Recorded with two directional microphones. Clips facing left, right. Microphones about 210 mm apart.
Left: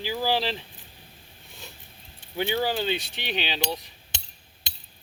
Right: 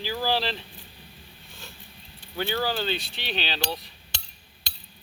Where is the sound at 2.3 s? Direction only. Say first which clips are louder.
Left 2 dB; 15° left (ahead or behind).